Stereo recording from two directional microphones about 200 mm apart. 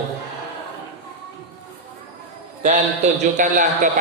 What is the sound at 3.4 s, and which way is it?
Speech, 40° right (ahead or behind).